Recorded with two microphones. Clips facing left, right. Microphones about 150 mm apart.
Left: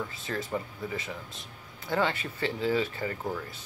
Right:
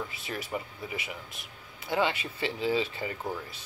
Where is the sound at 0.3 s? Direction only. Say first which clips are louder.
Left 3 dB; 15° right (ahead or behind).